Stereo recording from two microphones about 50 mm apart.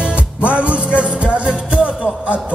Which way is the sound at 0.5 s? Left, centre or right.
Right.